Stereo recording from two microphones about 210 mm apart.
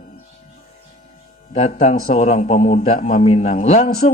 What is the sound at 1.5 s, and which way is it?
A man's voice, 30° left (ahead or behind).